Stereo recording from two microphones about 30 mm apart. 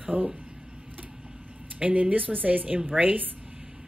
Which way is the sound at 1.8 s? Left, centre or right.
Right.